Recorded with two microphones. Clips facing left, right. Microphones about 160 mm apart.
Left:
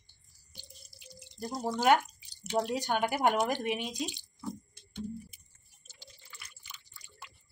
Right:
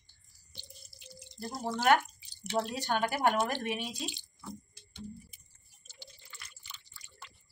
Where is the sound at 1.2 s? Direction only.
10° left (ahead or behind).